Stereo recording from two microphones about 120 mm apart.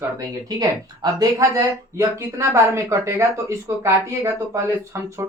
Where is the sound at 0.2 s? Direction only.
30° right (ahead or behind).